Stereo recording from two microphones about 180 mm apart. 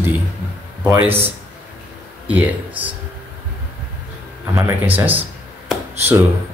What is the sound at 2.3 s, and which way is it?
Speech, 10° right (ahead or behind).